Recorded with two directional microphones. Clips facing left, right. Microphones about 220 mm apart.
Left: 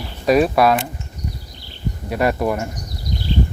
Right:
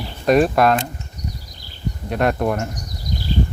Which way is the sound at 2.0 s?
5° left (ahead or behind).